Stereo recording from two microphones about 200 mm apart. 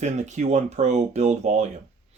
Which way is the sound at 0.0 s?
35° right (ahead or behind).